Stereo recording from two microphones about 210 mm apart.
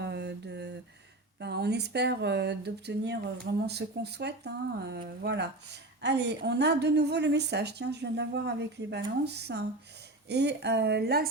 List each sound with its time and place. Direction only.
0.0 s mantra: 55° right (ahead or behind)
1.4 s a woman's voice: 55° right (ahead or behind)